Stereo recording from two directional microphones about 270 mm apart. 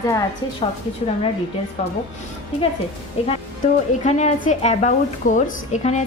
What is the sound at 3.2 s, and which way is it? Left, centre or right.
A woman's voice, left.